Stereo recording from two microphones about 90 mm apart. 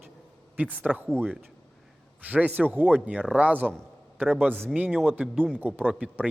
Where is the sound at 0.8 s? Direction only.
20° right (ahead or behind).